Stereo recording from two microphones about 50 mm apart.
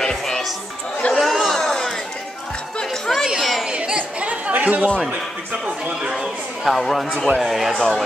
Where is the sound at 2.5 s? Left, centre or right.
Centre.